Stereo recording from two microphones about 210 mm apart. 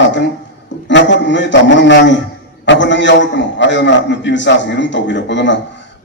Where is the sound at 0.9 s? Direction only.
60° left (ahead or behind).